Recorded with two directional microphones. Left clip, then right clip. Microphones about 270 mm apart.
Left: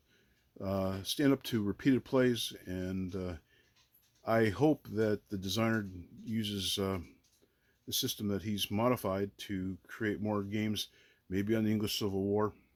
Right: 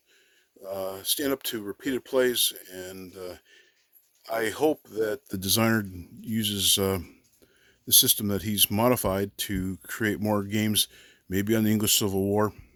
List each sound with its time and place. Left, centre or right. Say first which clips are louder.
0.8 s speech: right 5 dB; right